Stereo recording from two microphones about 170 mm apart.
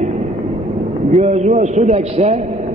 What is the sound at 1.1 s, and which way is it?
A man's voice, 40° right (ahead or behind).